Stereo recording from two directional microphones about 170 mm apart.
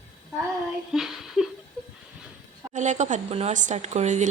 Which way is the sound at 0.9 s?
Centre (ahead or behind).